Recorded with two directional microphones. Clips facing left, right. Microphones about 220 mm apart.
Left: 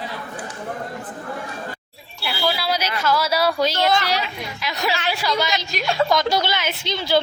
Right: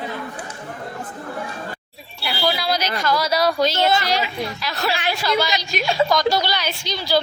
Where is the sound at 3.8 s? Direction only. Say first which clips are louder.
Left 1 dB; 5° right (ahead or behind).